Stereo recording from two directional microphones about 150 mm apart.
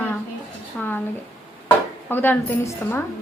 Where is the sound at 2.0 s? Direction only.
15° left (ahead or behind).